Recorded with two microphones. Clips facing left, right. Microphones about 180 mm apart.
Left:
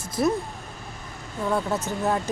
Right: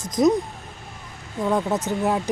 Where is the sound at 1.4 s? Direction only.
15° right (ahead or behind).